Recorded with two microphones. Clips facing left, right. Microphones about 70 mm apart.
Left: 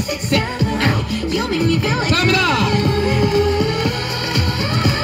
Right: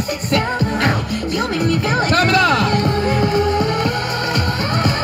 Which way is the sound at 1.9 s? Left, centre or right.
Right.